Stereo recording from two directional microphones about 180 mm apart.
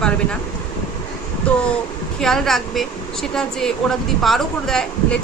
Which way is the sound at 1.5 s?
5° left (ahead or behind).